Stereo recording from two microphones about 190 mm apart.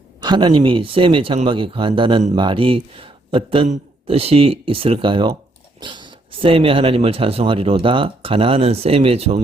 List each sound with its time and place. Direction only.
0.2 s speech: 25° right (ahead or behind)